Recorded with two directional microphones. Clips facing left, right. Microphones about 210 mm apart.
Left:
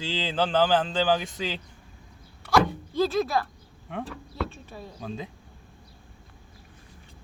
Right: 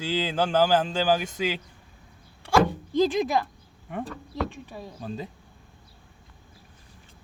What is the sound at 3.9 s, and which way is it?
Speech, 5° right (ahead or behind).